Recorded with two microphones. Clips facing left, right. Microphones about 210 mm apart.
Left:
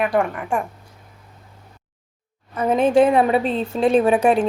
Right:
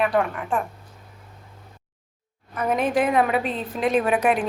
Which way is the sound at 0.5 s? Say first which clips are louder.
Left 2 dB; 15° left (ahead or behind).